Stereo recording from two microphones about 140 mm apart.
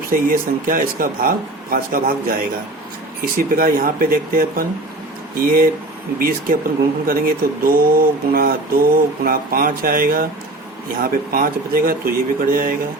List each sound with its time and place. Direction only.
0.1 s speech: 80° right